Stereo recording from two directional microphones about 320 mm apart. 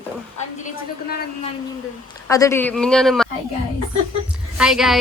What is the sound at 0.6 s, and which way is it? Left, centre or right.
Speech, left.